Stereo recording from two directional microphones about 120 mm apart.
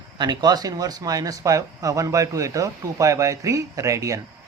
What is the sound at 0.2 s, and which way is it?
Speech, 35° right (ahead or behind).